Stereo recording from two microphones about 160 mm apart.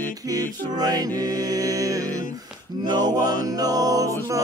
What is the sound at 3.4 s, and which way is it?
Music, 25° right (ahead or behind).